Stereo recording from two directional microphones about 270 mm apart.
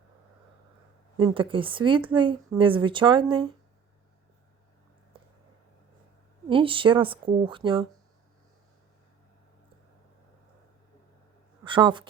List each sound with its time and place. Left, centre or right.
1.1 s a woman's voice: centre
5.1 s a sound: centre
6.5 s a woman's voice: centre
11.6 s a woman's voice: centre